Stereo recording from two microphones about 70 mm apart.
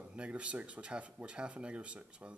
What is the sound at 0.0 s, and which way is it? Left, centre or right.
Speech, centre.